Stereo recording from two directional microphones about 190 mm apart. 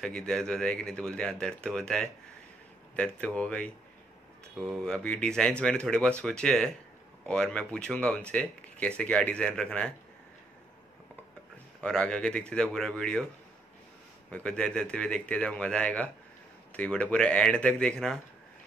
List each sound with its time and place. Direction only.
0.0 s speech: 5° left (ahead or behind)
4.7 s speech: 5° left (ahead or behind)
11.8 s speech: 5° left (ahead or behind)
14.3 s speech: 5° left (ahead or behind)